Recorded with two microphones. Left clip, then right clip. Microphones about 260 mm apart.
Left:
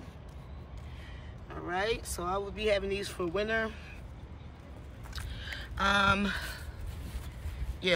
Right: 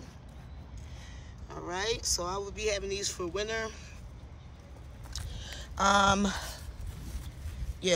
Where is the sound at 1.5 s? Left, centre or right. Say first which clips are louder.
Left 1 dB; centre.